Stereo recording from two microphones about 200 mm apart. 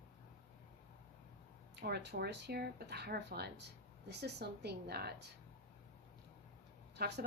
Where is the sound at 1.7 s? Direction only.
55° right (ahead or behind).